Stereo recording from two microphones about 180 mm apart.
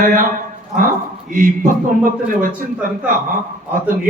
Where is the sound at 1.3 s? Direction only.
50° right (ahead or behind).